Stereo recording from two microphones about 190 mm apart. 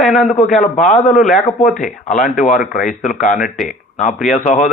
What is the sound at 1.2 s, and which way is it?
Speech, 40° left (ahead or behind).